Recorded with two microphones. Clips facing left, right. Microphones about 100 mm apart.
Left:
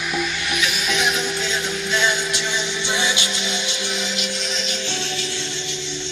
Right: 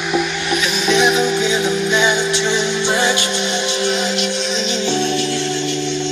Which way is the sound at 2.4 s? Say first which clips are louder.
Right 8 dB; 60° right (ahead or behind).